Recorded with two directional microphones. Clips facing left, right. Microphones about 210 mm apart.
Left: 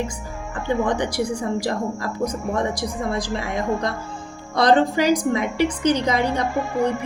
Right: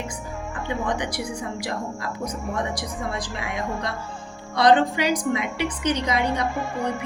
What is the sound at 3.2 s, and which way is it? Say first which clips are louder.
Speech: left 6 dB; 40° left (ahead or behind).